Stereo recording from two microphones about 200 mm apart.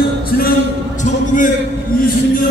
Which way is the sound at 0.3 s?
50° left (ahead or behind).